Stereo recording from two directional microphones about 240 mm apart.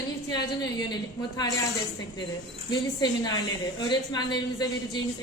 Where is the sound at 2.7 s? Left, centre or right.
Centre.